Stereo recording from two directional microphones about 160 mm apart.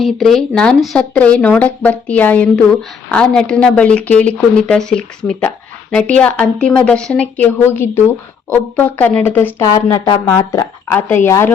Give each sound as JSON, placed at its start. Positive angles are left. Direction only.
{"t": 0.0, "sound": "speech", "side_deg": 0}